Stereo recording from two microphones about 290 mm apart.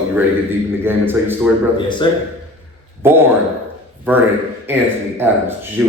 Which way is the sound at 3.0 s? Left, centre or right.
Centre.